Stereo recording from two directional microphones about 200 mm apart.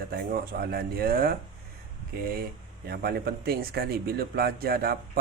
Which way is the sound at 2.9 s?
50° right (ahead or behind).